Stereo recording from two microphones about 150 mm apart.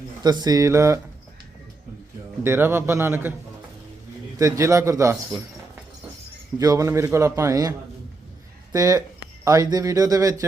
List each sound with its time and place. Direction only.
0.2 s a man's voice: 25° right (ahead or behind)
2.4 s a man's voice: 15° right (ahead or behind)
4.4 s a man's voice: 20° right (ahead or behind)
6.6 s a man's voice: 25° right (ahead or behind)